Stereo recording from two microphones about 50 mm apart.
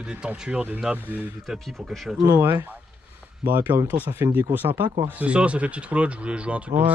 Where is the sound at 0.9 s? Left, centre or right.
Centre.